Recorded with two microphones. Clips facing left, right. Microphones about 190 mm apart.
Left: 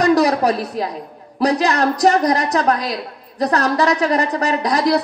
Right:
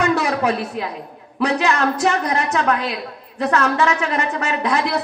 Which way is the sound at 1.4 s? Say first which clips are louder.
Left 2 dB; 40° left (ahead or behind).